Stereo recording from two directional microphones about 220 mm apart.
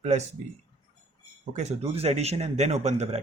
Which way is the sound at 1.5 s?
30° right (ahead or behind).